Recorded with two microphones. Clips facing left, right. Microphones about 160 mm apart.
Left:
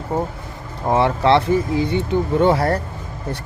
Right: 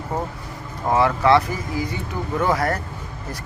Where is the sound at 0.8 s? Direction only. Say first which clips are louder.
Left 1 dB; 25° left (ahead or behind).